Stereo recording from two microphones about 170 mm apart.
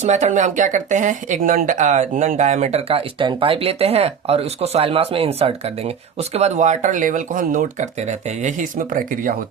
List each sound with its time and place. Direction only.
0.0 s speech: 45° right (ahead or behind)